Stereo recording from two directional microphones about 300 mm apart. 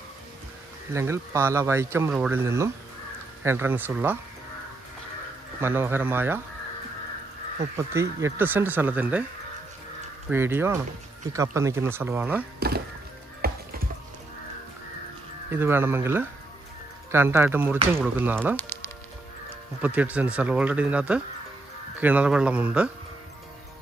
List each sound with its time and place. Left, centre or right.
0.9 s speech: centre
5.6 s speech: centre
7.7 s speech: centre
10.3 s speech: centre
12.5 s speech: right
13.4 s music: right
15.5 s speech: centre
18.6 s music: centre
19.8 s speech: centre